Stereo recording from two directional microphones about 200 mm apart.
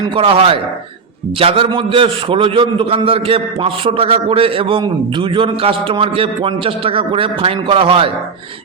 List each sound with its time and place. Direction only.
0.2 s a man's voice: 25° right (ahead or behind)